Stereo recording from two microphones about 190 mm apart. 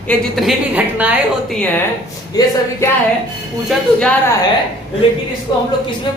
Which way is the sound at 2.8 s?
15° left (ahead or behind).